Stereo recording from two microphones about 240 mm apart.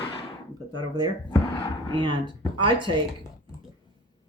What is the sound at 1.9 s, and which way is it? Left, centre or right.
Speech, centre.